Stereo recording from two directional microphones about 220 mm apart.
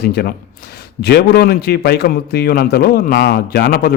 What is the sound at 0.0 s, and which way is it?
A man's voice, 45° left (ahead or behind).